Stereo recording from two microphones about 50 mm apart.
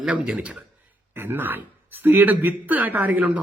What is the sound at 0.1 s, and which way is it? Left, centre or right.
Speech, right.